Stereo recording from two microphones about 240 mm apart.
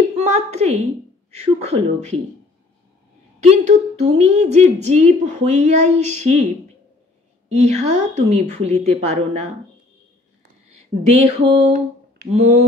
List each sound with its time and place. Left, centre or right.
0.3 s a sound: right
1.4 s a woman's voice: right
3.4 s a woman's voice: right
7.4 s a woman's voice: right
10.7 s a sound: right
12.3 s a woman's voice: right